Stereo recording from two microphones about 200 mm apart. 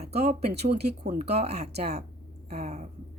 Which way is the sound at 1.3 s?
30° right (ahead or behind).